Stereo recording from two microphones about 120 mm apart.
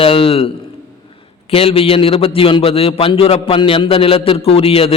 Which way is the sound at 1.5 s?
55° left (ahead or behind).